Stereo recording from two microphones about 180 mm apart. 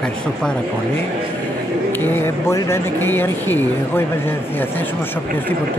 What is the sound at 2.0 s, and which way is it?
Speech, 15° left (ahead or behind).